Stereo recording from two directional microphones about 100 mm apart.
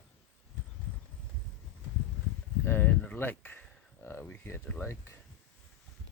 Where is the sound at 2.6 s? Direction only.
20° left (ahead or behind).